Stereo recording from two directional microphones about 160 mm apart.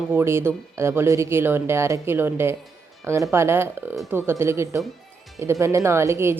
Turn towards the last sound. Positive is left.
turn(degrees=-15)  # may be behind; listen again after turning